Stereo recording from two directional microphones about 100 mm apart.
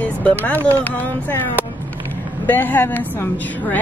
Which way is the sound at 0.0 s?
15° left (ahead or behind).